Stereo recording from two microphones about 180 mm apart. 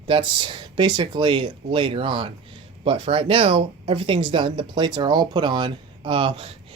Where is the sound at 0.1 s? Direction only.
25° right (ahead or behind).